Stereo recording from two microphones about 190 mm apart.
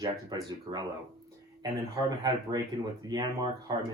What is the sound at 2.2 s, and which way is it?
Speech, 20° right (ahead or behind).